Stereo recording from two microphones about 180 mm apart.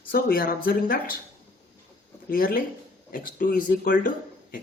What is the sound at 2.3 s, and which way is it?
Speech, 50° left (ahead or behind).